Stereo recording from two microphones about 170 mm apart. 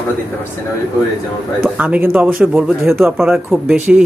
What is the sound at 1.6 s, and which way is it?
A man's voice, 10° right (ahead or behind).